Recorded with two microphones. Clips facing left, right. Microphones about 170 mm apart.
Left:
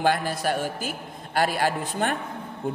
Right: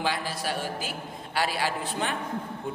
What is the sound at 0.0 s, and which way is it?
A man's voice, 50° left (ahead or behind).